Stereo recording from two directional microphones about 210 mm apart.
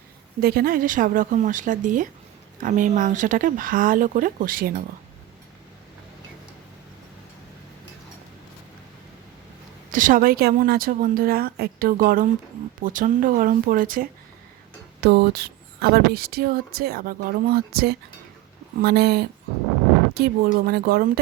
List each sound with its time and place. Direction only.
0.4 s speech: 45° right (ahead or behind)
9.9 s speech: 40° right (ahead or behind)